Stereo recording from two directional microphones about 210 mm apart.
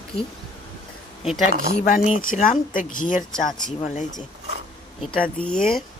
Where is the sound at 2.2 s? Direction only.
40° left (ahead or behind).